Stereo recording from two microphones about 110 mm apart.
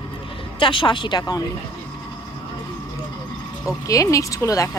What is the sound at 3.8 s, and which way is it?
Speech, 30° left (ahead or behind).